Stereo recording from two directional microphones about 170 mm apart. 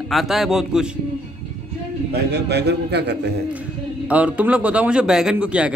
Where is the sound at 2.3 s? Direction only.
75° right (ahead or behind).